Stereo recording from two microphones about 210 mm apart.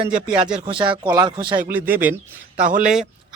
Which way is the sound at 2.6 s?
40° right (ahead or behind).